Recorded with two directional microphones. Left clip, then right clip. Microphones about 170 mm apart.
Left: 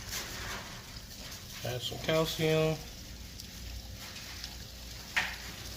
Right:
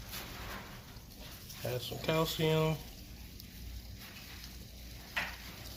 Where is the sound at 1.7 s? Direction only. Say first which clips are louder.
Left 2 dB; 20° right (ahead or behind).